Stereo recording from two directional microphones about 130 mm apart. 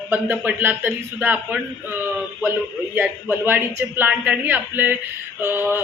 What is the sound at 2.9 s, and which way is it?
Speech, 15° right (ahead or behind).